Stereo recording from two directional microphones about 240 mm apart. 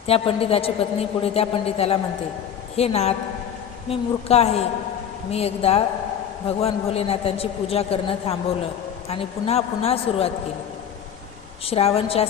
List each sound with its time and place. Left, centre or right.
0.0 s a woman's voice: left
11.6 s a woman's voice: left